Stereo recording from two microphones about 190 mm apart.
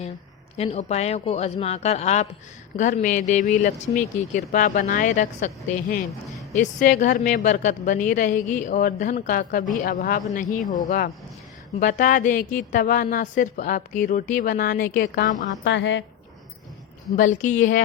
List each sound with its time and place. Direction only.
0.5 s a woman's voice: 30° left (ahead or behind); by 15.3 s 60° left (ahead or behind)
15.6 s a woman's voice: 70° left (ahead or behind)
17.2 s speech: 40° left (ahead or behind)